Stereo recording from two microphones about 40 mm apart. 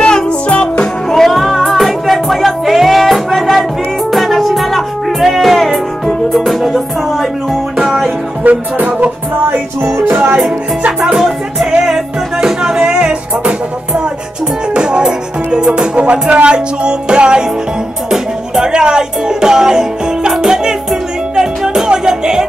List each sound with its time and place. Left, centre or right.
0.0 s music: left
1.1 s music: centre
8.5 s music: right
10.0 s music: right
12.4 s music: centre